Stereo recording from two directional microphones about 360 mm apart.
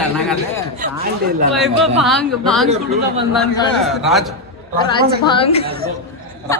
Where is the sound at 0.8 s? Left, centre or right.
Right.